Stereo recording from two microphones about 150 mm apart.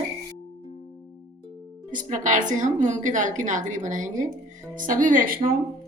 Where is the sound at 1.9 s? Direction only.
60° right (ahead or behind).